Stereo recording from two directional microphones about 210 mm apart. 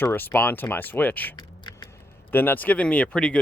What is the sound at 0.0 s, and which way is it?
Speech, 10° left (ahead or behind).